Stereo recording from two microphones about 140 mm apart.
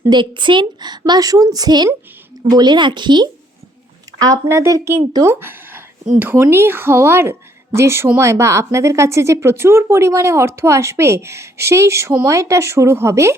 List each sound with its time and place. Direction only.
0.1 s a woman's voice: 35° right (ahead or behind)
4.2 s a woman's voice: 20° right (ahead or behind)